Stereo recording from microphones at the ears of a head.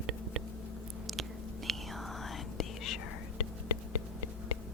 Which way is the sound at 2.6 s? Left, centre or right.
Left.